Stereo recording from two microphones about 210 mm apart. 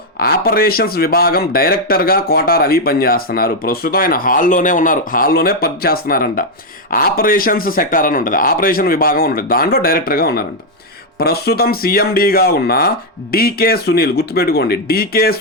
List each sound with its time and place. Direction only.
0.2 s a man's voice: 45° left (ahead or behind)